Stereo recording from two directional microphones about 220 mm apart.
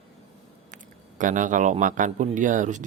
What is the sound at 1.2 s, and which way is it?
Speech, 35° right (ahead or behind).